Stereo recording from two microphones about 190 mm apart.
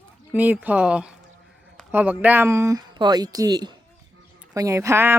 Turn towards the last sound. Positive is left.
turn(degrees=-15)  # may be behind; listen again after turning